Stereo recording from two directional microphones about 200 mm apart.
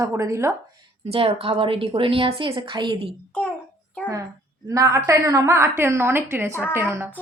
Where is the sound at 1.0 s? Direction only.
30° right (ahead or behind).